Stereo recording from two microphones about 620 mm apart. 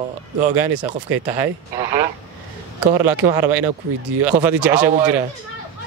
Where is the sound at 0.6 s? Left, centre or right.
Right.